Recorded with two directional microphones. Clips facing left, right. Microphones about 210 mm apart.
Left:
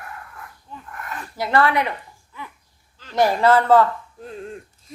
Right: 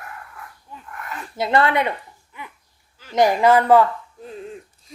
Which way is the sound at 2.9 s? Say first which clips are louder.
Right 2 dB; 15° right (ahead or behind).